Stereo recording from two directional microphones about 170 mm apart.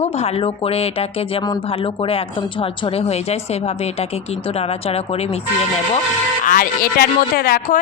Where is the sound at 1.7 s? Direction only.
35° left (ahead or behind).